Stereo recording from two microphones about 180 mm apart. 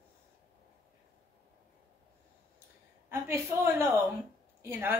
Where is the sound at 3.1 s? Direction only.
15° right (ahead or behind).